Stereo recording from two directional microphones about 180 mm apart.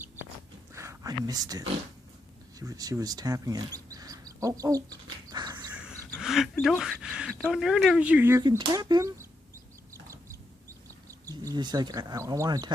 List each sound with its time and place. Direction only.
0.7 s a sound: 15° right (ahead or behind)
2.6 s speech: 20° right (ahead or behind)
6.1 s speech: centre (ahead or behind)
8.4 s speech: 25° right (ahead or behind)
11.1 s speech: 20° right (ahead or behind)